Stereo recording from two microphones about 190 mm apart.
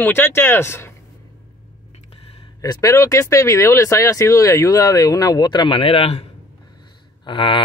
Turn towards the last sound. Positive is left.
turn(degrees=25)  # may be behind; listen again after turning